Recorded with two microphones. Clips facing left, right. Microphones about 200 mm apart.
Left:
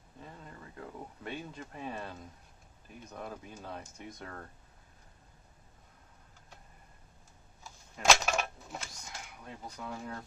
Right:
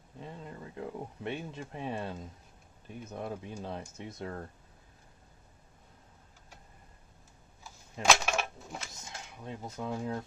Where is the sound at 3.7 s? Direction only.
25° right (ahead or behind).